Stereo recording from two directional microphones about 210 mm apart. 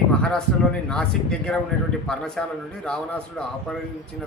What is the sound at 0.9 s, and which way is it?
A man's voice, 5° left (ahead or behind).